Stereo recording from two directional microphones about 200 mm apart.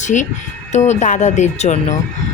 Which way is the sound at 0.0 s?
35° left (ahead or behind).